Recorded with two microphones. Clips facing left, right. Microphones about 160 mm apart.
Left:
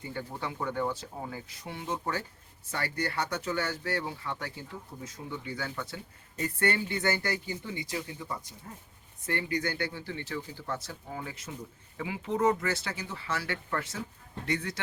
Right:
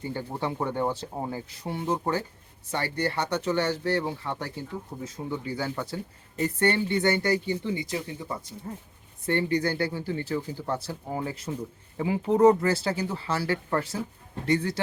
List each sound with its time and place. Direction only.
0.0 s speech: 30° right (ahead or behind)